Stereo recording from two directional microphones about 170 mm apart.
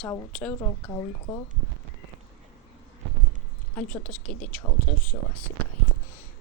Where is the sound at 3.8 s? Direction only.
5° left (ahead or behind).